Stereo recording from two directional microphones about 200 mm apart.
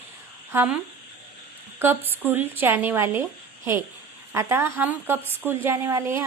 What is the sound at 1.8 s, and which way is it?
A woman's voice, 10° right (ahead or behind).